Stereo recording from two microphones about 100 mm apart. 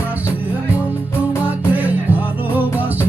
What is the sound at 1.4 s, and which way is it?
Music, 15° right (ahead or behind).